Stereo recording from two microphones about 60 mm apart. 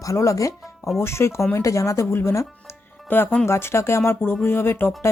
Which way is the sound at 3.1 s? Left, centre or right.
Left.